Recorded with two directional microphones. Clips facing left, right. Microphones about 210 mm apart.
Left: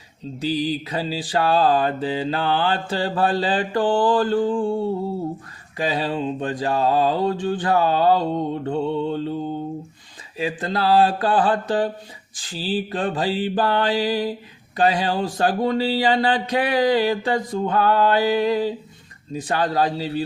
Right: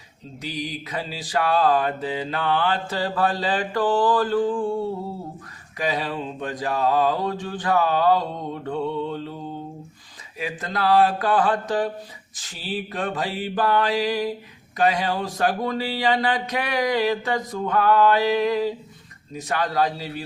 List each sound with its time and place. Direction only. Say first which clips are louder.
0.4 s mantra: left 8 dB; 30° left (ahead or behind)
5.7 s mantra: left 3 dB; 30° left (ahead or behind)